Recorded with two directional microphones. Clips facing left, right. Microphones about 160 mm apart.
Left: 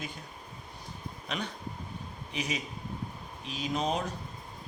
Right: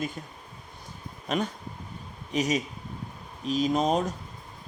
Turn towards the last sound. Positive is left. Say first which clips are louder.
# right 7 dB
turn(degrees=-45)  # may be behind; listen again after turning